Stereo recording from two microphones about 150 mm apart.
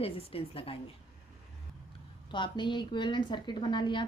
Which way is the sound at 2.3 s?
30° left (ahead or behind).